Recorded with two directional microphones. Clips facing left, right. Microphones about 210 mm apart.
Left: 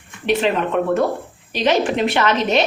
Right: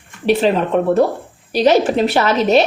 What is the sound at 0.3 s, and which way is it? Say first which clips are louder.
A woman's voice: right 4 dB; 35° right (ahead or behind).